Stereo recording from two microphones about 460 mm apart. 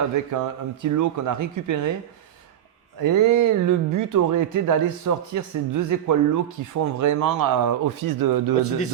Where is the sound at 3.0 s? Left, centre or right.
Right.